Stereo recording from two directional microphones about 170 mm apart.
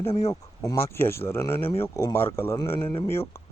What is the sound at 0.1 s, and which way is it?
Speech, 40° left (ahead or behind).